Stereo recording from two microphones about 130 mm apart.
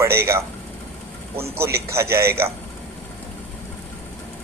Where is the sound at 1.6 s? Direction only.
20° right (ahead or behind).